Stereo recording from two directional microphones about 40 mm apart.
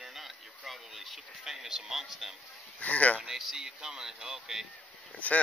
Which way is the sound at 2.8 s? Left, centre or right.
Left.